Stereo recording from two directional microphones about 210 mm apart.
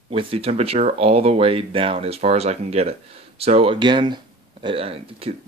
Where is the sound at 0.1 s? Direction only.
25° right (ahead or behind).